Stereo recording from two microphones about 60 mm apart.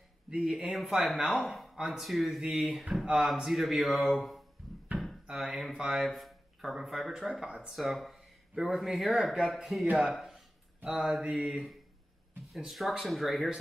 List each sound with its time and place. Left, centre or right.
0.7 s speech: centre
6.0 s a sound: centre
6.7 s speech: centre
12.5 s speech: centre